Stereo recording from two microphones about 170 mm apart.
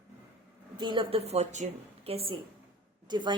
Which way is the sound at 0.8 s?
30° right (ahead or behind).